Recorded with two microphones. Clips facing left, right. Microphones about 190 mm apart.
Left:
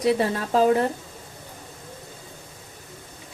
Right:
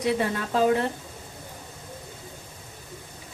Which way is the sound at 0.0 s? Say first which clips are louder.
Left 3 dB; 35° left (ahead or behind).